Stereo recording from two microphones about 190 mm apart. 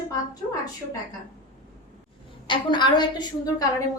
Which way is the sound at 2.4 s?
25° left (ahead or behind).